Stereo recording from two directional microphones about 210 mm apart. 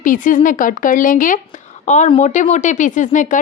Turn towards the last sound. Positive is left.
turn(degrees=35)  # may be behind; listen again after turning